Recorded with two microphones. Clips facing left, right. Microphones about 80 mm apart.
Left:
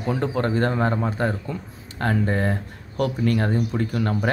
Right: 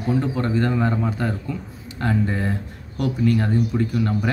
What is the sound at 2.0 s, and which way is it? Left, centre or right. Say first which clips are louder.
Speech: even; left.